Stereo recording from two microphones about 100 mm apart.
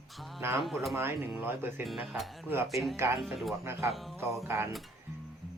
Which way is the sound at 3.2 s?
Centre (ahead or behind).